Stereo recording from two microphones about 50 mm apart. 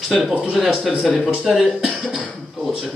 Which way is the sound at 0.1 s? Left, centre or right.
Centre.